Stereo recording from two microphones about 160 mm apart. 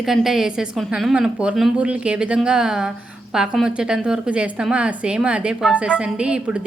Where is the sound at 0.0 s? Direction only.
Centre (ahead or behind).